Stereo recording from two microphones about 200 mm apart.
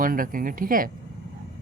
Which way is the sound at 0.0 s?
45° right (ahead or behind).